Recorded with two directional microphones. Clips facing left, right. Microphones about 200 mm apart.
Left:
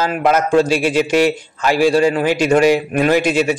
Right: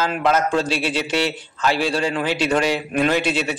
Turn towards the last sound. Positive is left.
turn(degrees=10)  # may be behind; listen again after turning